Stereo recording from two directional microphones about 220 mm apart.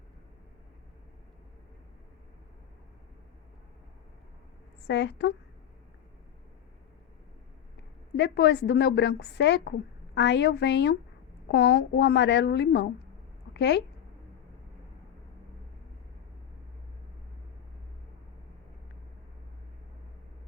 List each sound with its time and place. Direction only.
4.9 s a woman's voice: 50° left (ahead or behind)
8.1 s a woman's voice: 50° left (ahead or behind)